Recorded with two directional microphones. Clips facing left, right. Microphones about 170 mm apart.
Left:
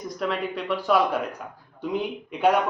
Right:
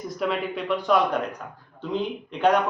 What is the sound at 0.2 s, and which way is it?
A man's voice, centre (ahead or behind).